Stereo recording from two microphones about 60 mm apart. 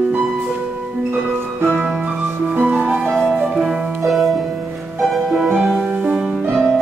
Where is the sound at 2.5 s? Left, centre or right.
Right.